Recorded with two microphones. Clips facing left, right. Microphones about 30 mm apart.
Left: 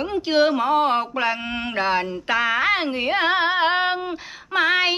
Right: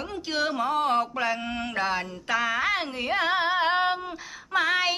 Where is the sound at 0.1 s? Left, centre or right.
Left.